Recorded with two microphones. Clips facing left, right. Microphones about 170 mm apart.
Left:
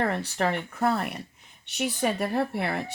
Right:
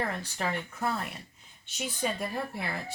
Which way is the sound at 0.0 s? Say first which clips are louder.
Left 6 dB; 65° left (ahead or behind).